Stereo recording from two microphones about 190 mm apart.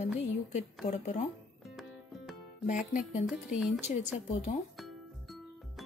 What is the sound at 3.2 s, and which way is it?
Speech, centre (ahead or behind).